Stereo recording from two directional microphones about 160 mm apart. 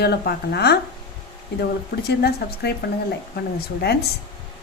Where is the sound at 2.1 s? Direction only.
90° left.